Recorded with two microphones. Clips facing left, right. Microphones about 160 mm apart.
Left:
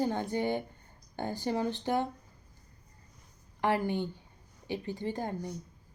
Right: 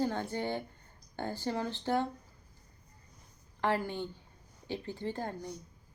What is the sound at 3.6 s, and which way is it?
Speech, 15° left (ahead or behind).